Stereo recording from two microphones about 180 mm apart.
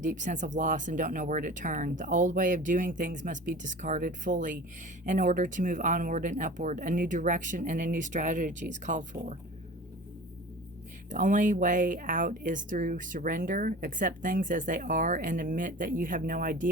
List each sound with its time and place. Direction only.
0.0 s speech: 45° right (ahead or behind)
11.1 s speech: 45° right (ahead or behind)